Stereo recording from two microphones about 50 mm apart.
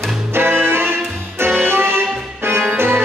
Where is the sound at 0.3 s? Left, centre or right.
Right.